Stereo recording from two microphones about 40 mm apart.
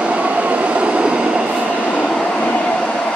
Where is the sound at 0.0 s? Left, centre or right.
Right.